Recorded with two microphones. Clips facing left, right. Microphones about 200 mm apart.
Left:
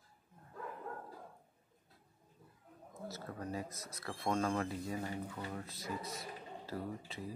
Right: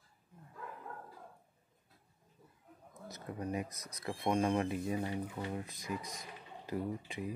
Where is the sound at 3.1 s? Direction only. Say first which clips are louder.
Right 4 dB; 15° right (ahead or behind).